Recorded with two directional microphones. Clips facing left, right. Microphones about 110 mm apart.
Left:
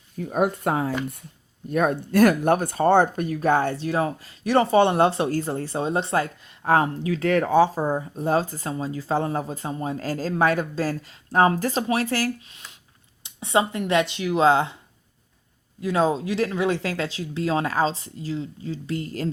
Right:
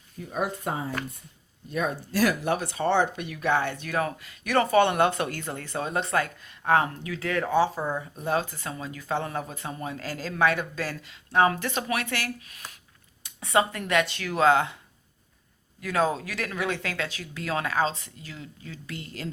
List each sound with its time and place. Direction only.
0.2 s speech: 55° left (ahead or behind); by 0.9 s 70° left (ahead or behind)
1.7 s speech: 55° left (ahead or behind); by 7.3 s 35° left (ahead or behind)
7.3 s speech: 60° left (ahead or behind)
7.5 s speech: 40° left (ahead or behind)
15.8 s speech: 25° left (ahead or behind)